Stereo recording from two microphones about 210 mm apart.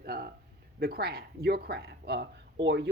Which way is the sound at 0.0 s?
45° right (ahead or behind).